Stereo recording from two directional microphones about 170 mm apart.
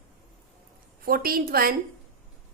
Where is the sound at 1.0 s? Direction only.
60° right (ahead or behind).